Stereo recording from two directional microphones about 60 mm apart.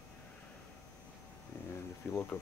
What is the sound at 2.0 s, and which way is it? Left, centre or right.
Speech, left.